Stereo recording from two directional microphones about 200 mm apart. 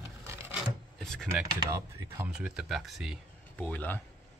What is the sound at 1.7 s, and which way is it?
Speech, 10° right (ahead or behind).